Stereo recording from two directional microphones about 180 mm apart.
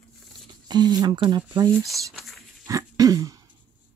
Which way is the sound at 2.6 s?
20° right (ahead or behind).